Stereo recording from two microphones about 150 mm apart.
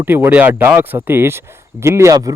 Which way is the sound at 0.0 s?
15° right (ahead or behind).